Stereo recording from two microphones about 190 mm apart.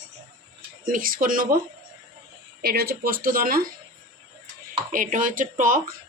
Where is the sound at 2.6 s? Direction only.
55° right (ahead or behind).